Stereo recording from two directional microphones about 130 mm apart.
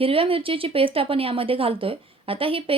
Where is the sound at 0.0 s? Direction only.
45° right (ahead or behind).